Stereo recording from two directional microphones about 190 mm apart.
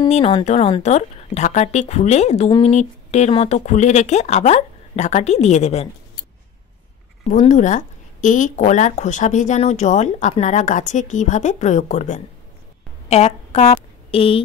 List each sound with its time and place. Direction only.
0.1 s a woman's voice: 30° left (ahead or behind)
7.2 s a woman's voice: 40° left (ahead or behind)